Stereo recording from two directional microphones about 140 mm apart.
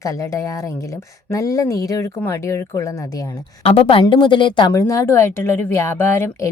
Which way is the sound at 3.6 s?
40° left (ahead or behind).